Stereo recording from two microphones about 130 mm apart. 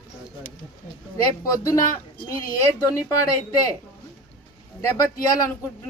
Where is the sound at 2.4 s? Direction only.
25° left (ahead or behind).